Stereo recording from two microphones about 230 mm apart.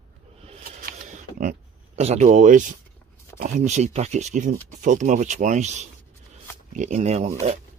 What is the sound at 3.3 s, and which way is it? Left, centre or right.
Speech, right.